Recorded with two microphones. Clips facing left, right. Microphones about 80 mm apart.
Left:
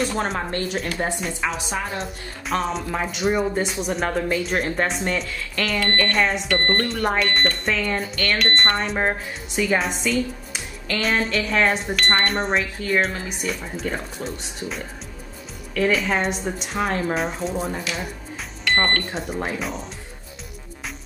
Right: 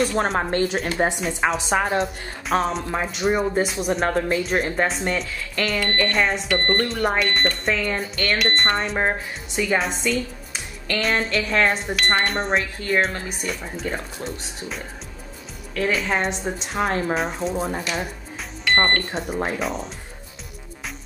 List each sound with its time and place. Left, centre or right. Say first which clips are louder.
0.0 s speech: right 3 dB; centre
0.4 s a woman's voice: right 4 dB; right
1.4 s a woman's voice: right 5 dB; right
2.0 s a woman's voice: right 6 dB; centre
11.9 s speech: even; centre
12.3 s speech: even; centre
17.6 s speech: right 1 dB; centre
18.9 s speech: right 1 dB; centre